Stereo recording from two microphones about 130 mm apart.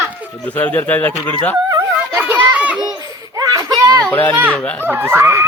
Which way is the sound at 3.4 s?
30° right (ahead or behind).